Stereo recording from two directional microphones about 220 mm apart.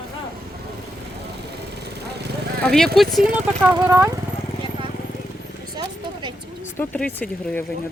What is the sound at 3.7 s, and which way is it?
Speech, 15° right (ahead or behind).